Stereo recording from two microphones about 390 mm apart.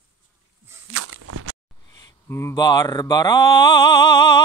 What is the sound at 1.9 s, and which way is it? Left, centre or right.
Speech, centre.